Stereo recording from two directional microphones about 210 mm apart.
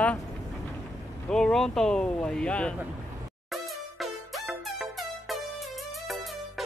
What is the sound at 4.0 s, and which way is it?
Music, centre (ahead or behind).